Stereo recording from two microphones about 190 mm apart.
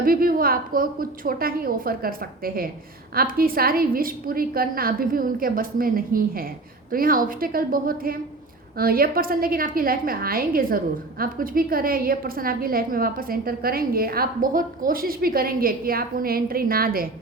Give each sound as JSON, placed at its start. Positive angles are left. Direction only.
{"t": 0.0, "sound": "a woman's voice", "side_deg": -50}